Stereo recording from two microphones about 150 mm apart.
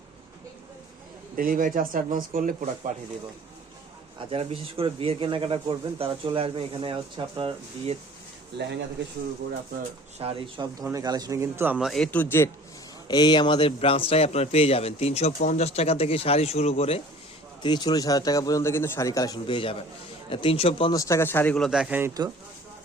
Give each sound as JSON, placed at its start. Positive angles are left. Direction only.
{"t": 1.4, "sound": "speech", "side_deg": -65}
{"t": 4.3, "sound": "speech", "side_deg": -40}
{"t": 10.2, "sound": "a man's voice", "side_deg": -40}
{"t": 11.8, "sound": "speech", "side_deg": 0}
{"t": 13.1, "sound": "a man's voice", "side_deg": 25}
{"t": 15.3, "sound": "speech", "side_deg": 60}
{"t": 17.6, "sound": "a man's voice", "side_deg": 30}
{"t": 20.9, "sound": "speech", "side_deg": 20}